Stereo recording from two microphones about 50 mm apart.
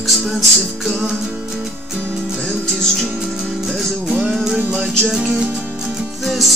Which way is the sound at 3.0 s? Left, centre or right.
Centre.